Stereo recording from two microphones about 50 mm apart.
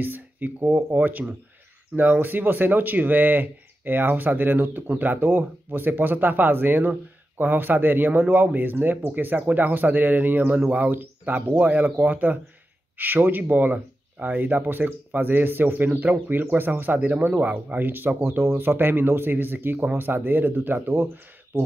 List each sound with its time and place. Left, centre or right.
0.0 s speech: right
17.7 s speech: right